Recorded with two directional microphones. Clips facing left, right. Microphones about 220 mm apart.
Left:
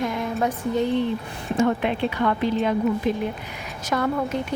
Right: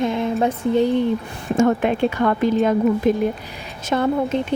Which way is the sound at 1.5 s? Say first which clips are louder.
Right 4 dB; 45° right (ahead or behind).